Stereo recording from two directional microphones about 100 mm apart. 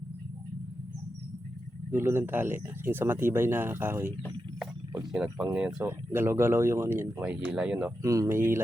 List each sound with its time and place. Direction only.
1.9 s speech: 20° right (ahead or behind)
5.1 s speech: 10° right (ahead or behind)
5.8 s speech: 25° right (ahead or behind)
8.0 s speech: 30° right (ahead or behind)